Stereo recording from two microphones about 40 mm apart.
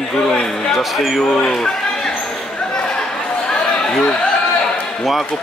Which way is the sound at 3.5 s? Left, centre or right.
Centre.